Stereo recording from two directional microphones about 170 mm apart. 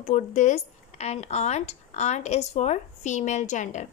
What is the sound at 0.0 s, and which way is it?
Speech, 45° left (ahead or behind).